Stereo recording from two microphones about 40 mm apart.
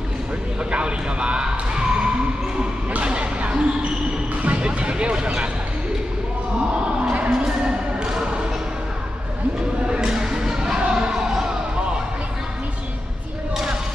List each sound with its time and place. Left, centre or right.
0.7 s speech: right
2.9 s music: right
5.2 s speech: right
6.9 s a sound: right
9.8 s a sound: centre
10.9 s music: centre